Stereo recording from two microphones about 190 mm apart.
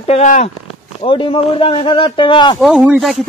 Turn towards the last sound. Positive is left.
turn(degrees=0)  # may be behind; listen again after turning